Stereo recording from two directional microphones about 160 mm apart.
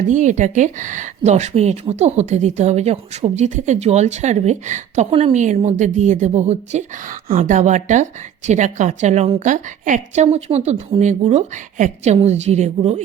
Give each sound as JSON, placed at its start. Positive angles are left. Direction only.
{"t": 0.1, "sound": "speech", "side_deg": -50}
{"t": 7.3, "sound": "speech", "side_deg": -55}